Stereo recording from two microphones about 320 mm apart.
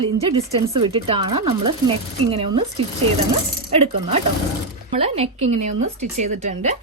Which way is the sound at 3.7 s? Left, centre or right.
Centre.